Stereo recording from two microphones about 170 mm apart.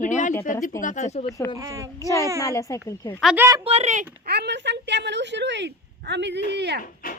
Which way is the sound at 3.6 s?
35° right (ahead or behind).